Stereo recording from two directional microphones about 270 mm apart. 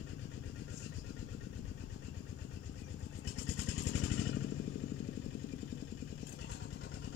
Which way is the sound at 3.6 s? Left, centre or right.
Left.